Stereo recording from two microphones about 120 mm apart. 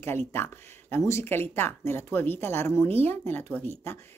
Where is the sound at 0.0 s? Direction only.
20° left (ahead or behind).